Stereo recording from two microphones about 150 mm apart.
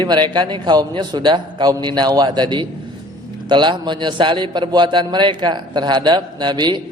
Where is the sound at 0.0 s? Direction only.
30° right (ahead or behind).